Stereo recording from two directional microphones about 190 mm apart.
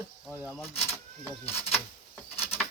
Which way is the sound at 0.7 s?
30° left (ahead or behind).